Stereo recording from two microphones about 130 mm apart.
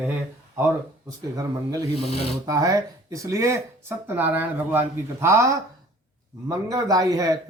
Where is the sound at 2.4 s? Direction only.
25° right (ahead or behind).